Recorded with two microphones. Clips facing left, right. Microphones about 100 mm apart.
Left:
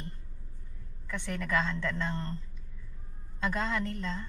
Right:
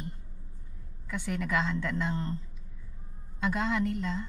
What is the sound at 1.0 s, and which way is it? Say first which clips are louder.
A woman's voice: right 3 dB; 10° right (ahead or behind).